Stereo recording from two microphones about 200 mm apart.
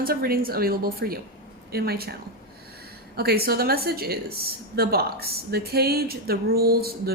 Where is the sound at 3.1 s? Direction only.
50° right (ahead or behind).